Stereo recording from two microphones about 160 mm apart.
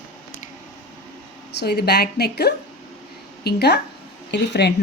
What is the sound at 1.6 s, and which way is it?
A woman's voice, 90° left.